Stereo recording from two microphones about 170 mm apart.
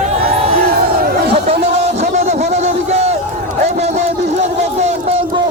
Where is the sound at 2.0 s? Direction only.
40° right (ahead or behind).